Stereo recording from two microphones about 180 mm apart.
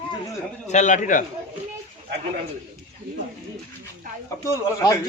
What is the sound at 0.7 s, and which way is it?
Speech, 40° left (ahead or behind).